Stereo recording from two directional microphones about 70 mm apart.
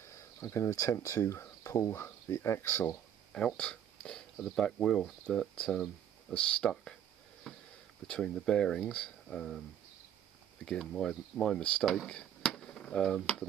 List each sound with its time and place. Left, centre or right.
0.1 s speech: left
3.3 s speech: centre
7.5 s a sound: centre
8.1 s speech: centre
10.6 s speech: centre
12.1 s chop: centre